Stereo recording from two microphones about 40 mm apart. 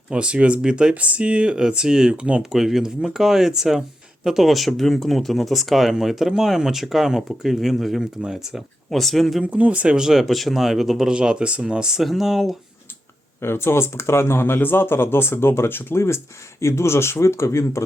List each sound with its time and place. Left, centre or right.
0.1 s speech: right
0.9 s speech: right
1.5 s speech: centre
2.4 s speech: centre
4.4 s speech: centre
8.2 s speech: centre
8.5 s speech: centre
9.6 s speech: right
9.8 s speech: right
10.1 s speech: centre
11.1 s speech: right
11.9 s speech: centre
13.4 s speech: left
14.6 s speech: left